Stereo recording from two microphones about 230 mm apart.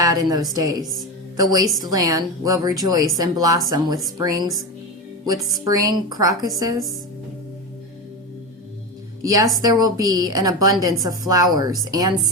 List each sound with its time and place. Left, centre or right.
0.0 s a woman's voice: centre
5.6 s a woman's voice: centre
9.2 s a woman's voice: centre